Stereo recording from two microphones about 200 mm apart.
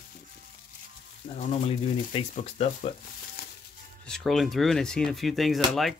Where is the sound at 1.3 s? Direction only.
30° left (ahead or behind).